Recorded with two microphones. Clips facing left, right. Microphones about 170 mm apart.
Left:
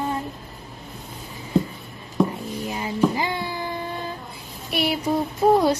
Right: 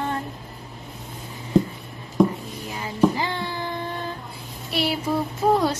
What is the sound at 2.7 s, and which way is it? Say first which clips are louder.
Cat: right 1 dB; 15° left (ahead or behind).